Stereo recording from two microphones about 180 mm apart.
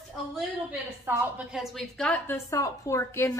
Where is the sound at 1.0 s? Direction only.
10° right (ahead or behind); by 2.4 s 5° left (ahead or behind).